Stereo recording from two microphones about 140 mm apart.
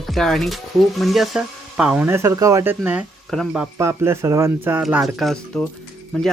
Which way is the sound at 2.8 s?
10° right (ahead or behind).